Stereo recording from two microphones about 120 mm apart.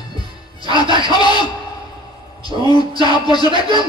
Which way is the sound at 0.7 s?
35° left (ahead or behind).